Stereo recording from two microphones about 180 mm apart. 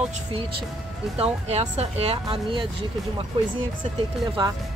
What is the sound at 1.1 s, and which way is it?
Speech, 35° right (ahead or behind).